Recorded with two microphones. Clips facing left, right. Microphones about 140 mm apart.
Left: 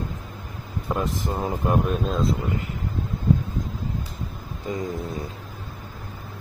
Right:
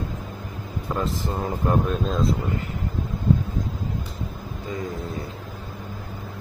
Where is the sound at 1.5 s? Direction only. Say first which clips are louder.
Even; 5° left (ahead or behind).